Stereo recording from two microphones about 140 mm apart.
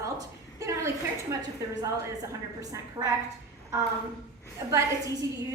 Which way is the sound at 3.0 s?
35° right (ahead or behind).